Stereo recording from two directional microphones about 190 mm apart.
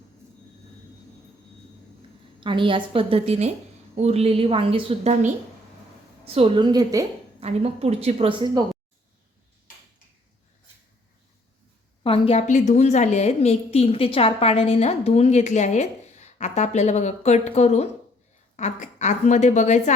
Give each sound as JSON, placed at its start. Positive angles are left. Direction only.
{"t": 2.0, "sound": "a woman's voice", "side_deg": -25}
{"t": 7.3, "sound": "a woman's voice", "side_deg": -30}
{"t": 12.0, "sound": "a woman's voice", "side_deg": 30}